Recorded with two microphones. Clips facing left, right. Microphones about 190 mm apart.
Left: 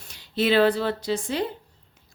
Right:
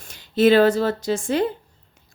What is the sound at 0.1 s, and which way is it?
A woman's voice, 45° right (ahead or behind).